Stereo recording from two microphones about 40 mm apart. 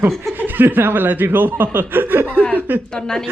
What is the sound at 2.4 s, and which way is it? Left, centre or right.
Speech, left.